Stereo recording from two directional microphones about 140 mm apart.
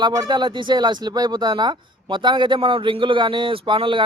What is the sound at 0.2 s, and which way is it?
Speech, 30° right (ahead or behind).